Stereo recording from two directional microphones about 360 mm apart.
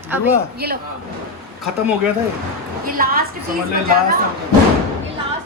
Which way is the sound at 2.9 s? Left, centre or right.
Right.